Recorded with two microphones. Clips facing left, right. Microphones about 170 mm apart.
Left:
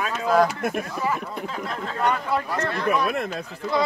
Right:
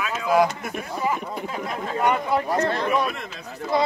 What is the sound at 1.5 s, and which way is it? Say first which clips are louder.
Speech: right 2 dB; 15° right (ahead or behind).